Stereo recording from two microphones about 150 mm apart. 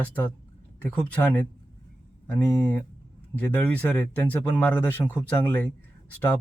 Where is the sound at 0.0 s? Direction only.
10° left (ahead or behind).